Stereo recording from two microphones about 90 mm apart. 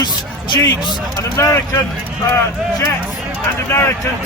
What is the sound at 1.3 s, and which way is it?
Speech, 35° left (ahead or behind).